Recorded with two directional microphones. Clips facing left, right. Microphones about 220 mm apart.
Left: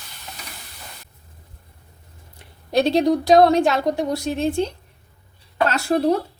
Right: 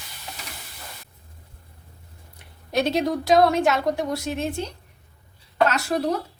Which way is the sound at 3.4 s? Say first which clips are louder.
Left 3 dB; 30° left (ahead or behind).